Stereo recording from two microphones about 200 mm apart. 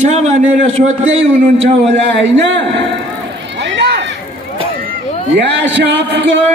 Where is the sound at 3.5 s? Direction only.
60° right (ahead or behind).